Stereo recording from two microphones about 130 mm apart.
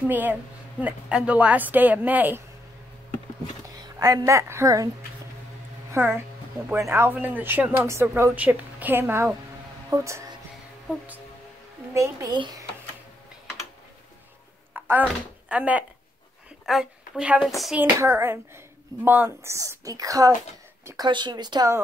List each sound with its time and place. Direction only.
0.1 s speech: 15° right (ahead or behind)
3.8 s a woman's voice: 25° right (ahead or behind)
9.8 s music: 25° right (ahead or behind)
11.9 s a woman's voice: 25° right (ahead or behind)
14.7 s a woman's voice: 10° right (ahead or behind)
17.7 s a woman's voice: 20° right (ahead or behind)